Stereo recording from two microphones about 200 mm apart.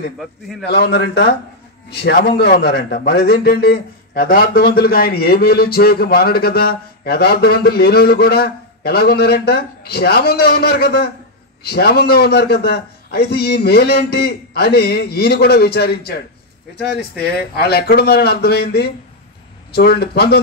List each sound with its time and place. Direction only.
0.2 s a man's voice: centre (ahead or behind)
0.7 s a man's voice: 55° left (ahead or behind)